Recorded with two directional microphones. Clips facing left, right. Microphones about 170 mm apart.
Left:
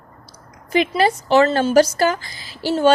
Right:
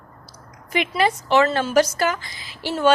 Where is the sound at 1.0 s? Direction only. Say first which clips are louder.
Left 2 dB; 35° left (ahead or behind).